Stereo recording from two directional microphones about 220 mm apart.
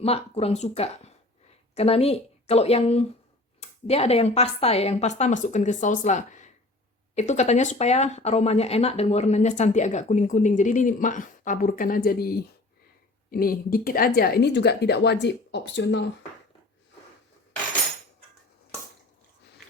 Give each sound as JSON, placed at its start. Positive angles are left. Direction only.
{"t": 0.0, "sound": "speech", "side_deg": 25}